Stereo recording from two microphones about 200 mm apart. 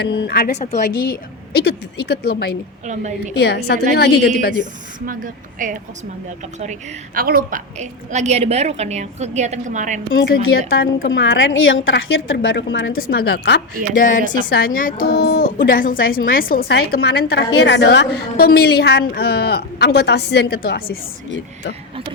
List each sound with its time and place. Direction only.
0.0 s a woman's voice: 55° left (ahead or behind)
2.8 s a woman's voice: 35° right (ahead or behind)
3.3 s a woman's voice: 55° left (ahead or behind)
5.0 s a woman's voice: 40° right (ahead or behind)
10.8 s a woman's voice: 75° left (ahead or behind)
13.0 s a woman's voice: 50° left (ahead or behind)